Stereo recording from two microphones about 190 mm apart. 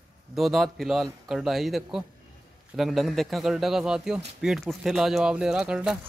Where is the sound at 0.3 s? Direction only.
Centre (ahead or behind).